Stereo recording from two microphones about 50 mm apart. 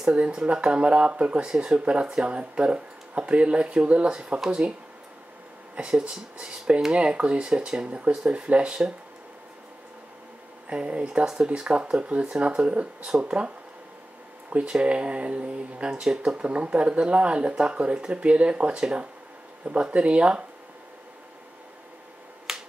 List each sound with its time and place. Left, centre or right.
0.1 s speech: right
5.8 s speech: centre
10.7 s speech: right
14.5 s speech: right
22.5 s finger snapping: centre